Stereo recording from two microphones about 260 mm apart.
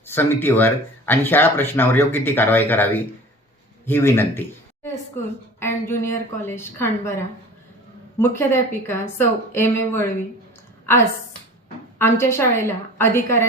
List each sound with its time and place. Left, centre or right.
0.0 s speech: centre
8.2 s speech: centre
11.9 s speech: centre